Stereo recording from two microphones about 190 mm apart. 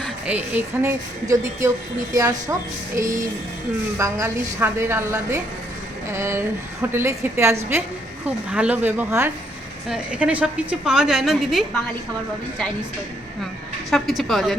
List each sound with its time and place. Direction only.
0.0 s a woman's voice: 5° right (ahead or behind)
13.9 s a woman's voice: centre (ahead or behind)